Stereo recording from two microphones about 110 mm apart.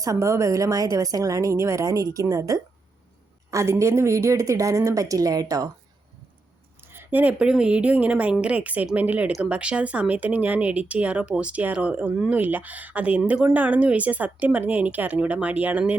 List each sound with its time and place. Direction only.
0.0 s speech: 30° right (ahead or behind)
6.8 s speech: 20° right (ahead or behind)